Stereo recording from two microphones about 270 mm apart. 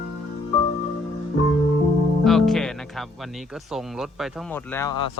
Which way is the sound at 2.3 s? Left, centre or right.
Centre.